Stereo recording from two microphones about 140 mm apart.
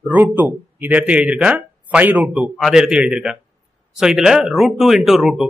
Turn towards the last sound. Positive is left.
turn(degrees=0)  # may be behind; listen again after turning